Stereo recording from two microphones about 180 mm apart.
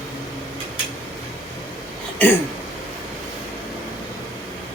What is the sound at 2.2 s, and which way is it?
Speech, 10° left (ahead or behind).